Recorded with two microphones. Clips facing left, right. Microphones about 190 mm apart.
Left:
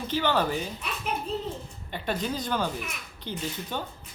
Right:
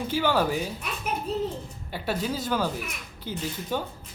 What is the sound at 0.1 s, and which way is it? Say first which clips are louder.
Speech: right 1 dB; 10° right (ahead or behind).